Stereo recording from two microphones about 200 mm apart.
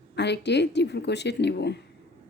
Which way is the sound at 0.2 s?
60° left (ahead or behind).